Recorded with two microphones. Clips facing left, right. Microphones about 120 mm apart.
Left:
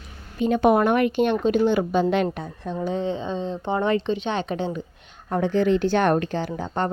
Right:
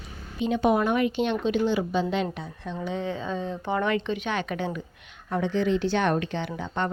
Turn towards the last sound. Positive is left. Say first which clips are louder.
# left 3 dB
turn(degrees=40)  # may be behind; listen again after turning